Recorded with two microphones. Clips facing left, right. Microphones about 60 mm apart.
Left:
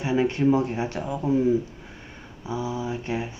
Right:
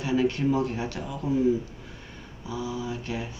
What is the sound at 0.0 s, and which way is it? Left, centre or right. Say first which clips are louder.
Speech: left 3 dB; left.